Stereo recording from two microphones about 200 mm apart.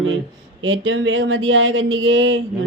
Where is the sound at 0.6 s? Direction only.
70° right (ahead or behind).